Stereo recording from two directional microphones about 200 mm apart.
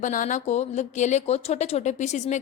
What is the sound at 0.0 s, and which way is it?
Speech, 40° left (ahead or behind).